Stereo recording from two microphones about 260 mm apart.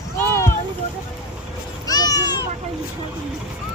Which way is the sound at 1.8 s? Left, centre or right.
Centre.